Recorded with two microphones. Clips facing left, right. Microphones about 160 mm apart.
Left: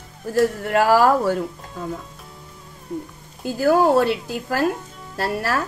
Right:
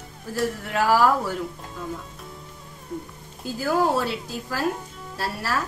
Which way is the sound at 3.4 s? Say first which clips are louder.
Left 6 dB; 60° left (ahead or behind).